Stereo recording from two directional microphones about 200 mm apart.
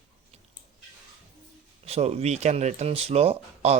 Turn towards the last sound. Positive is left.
turn(degrees=-30)  # may be behind; listen again after turning